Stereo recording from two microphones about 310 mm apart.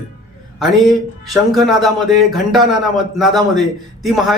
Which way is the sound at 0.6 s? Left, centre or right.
Centre.